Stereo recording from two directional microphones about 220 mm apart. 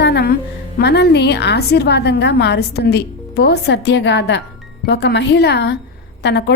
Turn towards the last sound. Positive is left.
turn(degrees=50)  # may be behind; listen again after turning